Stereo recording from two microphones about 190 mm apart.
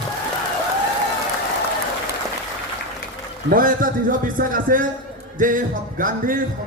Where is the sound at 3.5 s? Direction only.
50° right (ahead or behind).